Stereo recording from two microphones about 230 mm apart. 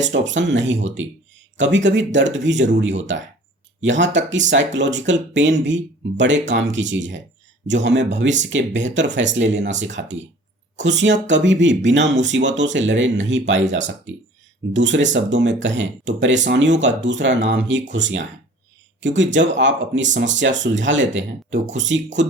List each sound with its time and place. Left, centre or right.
0.1 s speech: right